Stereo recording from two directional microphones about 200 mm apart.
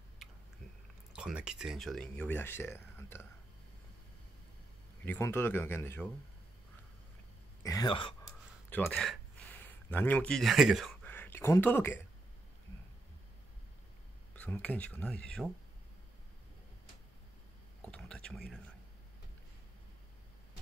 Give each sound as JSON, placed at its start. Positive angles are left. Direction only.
{"t": 1.1, "sound": "speech", "side_deg": -5}
{"t": 5.0, "sound": "speech", "side_deg": 10}
{"t": 7.6, "sound": "speech", "side_deg": 20}
{"t": 8.6, "sound": "speech", "side_deg": 10}
{"t": 11.1, "sound": "a sound", "side_deg": 10}
{"t": 14.3, "sound": "speech", "side_deg": 5}
{"t": 17.9, "sound": "a sound", "side_deg": 5}